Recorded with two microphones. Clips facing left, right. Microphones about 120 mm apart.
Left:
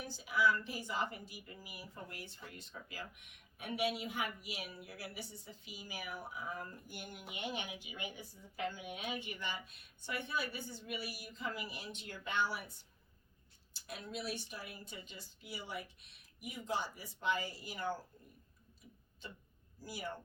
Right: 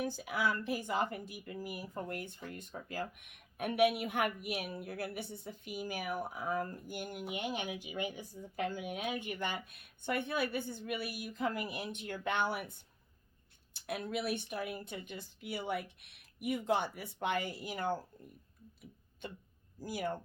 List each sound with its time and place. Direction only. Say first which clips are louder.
0.0 s speech: even; 55° right (ahead or behind)
13.7 s a woman's voice: right 8 dB; 60° right (ahead or behind)
19.2 s a woman's voice: right 6 dB; 55° right (ahead or behind)